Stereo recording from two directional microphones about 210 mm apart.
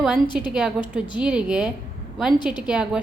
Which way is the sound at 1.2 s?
5° right (ahead or behind).